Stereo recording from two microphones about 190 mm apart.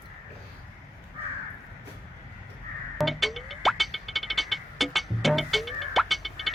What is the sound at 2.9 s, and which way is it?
Music, centre (ahead or behind).